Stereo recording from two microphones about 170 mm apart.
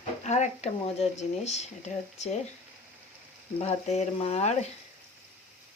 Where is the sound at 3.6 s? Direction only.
40° left (ahead or behind).